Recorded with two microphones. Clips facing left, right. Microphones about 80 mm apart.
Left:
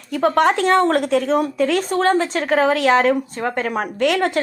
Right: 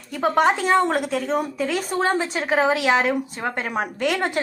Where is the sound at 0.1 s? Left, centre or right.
Centre.